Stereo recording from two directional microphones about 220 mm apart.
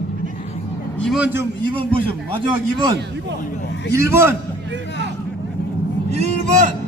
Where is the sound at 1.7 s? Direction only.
25° right (ahead or behind).